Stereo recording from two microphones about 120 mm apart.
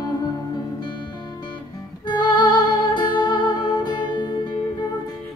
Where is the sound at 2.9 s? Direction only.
40° left (ahead or behind).